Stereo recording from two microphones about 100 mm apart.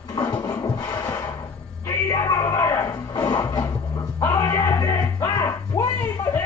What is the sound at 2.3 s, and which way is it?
Speech, 30° left (ahead or behind).